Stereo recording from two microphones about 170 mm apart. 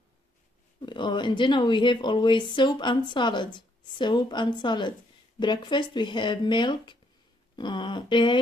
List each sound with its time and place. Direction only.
0.8 s speech: 25° left (ahead or behind)